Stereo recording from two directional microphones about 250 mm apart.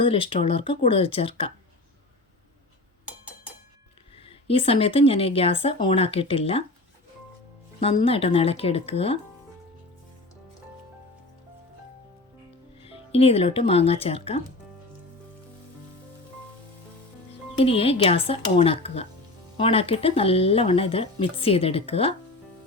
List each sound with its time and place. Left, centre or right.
0.0 s speech: left
4.2 s speech: left
7.8 s speech: left
12.8 s speech: left
17.6 s speech: left